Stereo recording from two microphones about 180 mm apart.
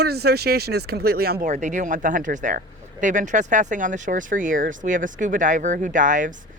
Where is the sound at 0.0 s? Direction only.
65° right (ahead or behind).